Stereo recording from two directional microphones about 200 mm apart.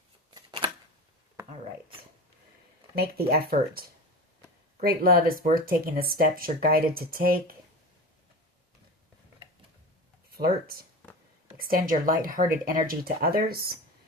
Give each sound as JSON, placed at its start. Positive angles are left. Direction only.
{"t": 0.3, "sound": "shuffling cards", "side_deg": -20}
{"t": 2.9, "sound": "speech", "side_deg": -50}
{"t": 4.8, "sound": "speech", "side_deg": -50}
{"t": 10.3, "sound": "speech", "side_deg": -50}